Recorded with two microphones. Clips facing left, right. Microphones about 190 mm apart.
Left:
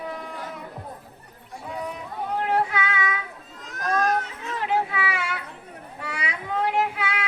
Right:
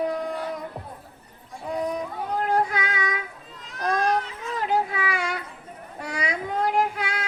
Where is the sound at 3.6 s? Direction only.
45° left (ahead or behind).